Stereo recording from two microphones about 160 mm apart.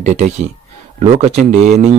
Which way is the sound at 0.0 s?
45° right (ahead or behind).